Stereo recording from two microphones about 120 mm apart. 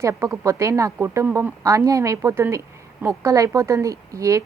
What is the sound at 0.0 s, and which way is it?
A woman's voice, 25° right (ahead or behind).